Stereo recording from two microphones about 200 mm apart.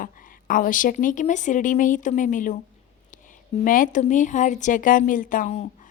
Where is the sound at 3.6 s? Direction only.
40° left (ahead or behind).